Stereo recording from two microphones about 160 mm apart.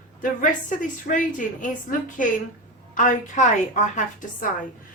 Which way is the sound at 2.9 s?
50° left (ahead or behind).